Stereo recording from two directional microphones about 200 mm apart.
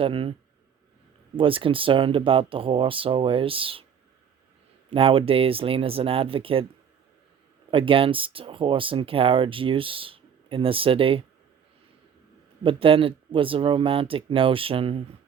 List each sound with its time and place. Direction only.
0.0 s speech: 25° right (ahead or behind)
1.4 s speech: 25° right (ahead or behind)
4.9 s speech: 30° right (ahead or behind)
7.7 s speech: 25° right (ahead or behind)
12.6 s speech: 25° right (ahead or behind)